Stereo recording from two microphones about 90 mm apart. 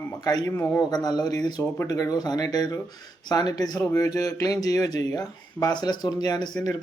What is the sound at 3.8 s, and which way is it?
Speech, 35° left (ahead or behind).